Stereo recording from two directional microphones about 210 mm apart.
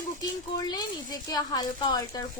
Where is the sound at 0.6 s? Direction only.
20° left (ahead or behind).